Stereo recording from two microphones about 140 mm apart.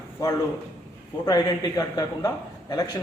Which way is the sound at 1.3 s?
30° left (ahead or behind).